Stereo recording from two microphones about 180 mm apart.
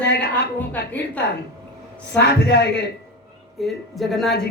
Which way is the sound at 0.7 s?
10° left (ahead or behind).